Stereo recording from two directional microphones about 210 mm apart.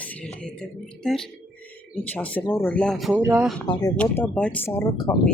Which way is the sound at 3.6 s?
20° left (ahead or behind).